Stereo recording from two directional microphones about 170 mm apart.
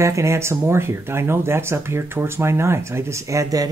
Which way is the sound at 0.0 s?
15° right (ahead or behind).